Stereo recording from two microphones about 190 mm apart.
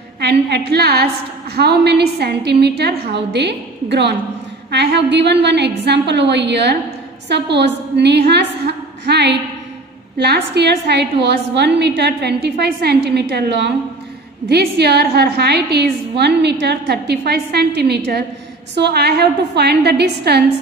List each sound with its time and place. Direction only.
0.2 s a woman's voice: 60° right (ahead or behind)